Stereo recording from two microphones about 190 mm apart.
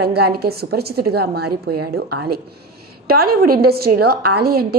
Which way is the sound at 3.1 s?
55° right (ahead or behind).